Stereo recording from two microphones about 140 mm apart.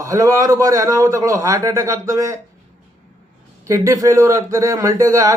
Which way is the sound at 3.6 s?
20° right (ahead or behind).